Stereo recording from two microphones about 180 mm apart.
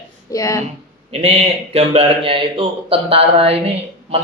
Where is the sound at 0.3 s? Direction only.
20° left (ahead or behind).